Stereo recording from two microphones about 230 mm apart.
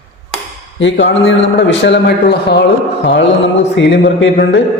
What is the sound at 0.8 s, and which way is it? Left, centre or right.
A man's voice, left.